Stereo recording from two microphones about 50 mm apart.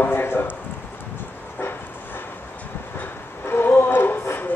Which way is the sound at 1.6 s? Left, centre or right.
Left.